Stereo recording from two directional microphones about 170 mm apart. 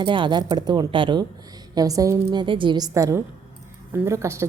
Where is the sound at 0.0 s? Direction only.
30° right (ahead or behind).